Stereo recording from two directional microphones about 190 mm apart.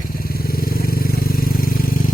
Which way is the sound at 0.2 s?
50° left (ahead or behind).